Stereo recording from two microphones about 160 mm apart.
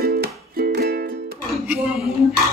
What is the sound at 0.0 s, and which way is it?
Music, 70° right (ahead or behind).